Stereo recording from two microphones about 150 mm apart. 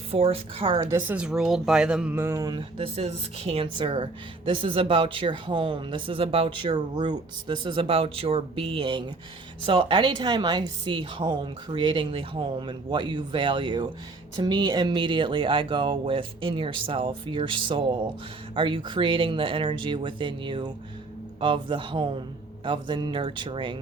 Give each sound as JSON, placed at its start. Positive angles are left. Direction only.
{"t": 0.1, "sound": "a woman's voice", "side_deg": -40}
{"t": 2.6, "sound": "speech", "side_deg": -40}